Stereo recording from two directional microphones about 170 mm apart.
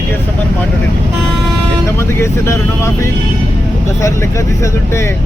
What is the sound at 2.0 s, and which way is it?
Speech, 15° left (ahead or behind).